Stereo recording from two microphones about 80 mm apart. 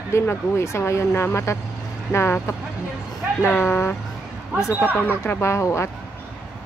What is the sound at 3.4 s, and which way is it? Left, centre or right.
Speech, left.